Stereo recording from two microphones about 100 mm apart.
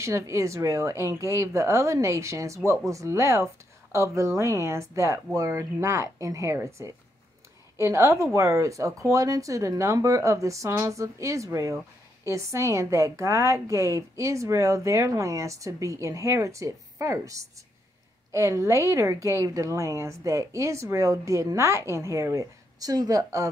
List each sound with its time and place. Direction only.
0.0 s a woman's voice: 30° right (ahead or behind)